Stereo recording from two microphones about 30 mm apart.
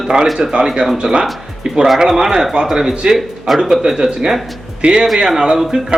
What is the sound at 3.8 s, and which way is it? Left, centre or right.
Speech, centre.